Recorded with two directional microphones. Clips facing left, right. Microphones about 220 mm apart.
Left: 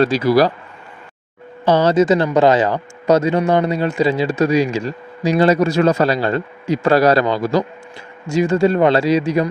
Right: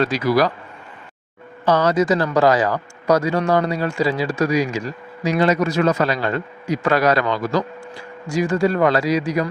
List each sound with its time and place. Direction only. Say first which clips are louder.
0.0 s speech: left 4 dB; 30° left (ahead or behind)
1.6 s speech: left 4 dB; 30° left (ahead or behind)